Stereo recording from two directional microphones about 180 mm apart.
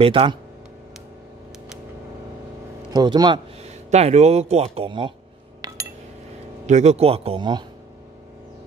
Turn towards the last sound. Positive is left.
turn(degrees=-25)  # may be behind; listen again after turning